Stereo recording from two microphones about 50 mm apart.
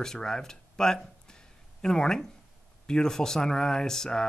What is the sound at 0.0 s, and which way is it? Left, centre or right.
Speech, centre.